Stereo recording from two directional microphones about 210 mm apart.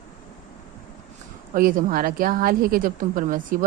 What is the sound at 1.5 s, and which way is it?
A woman's voice, 40° right (ahead or behind).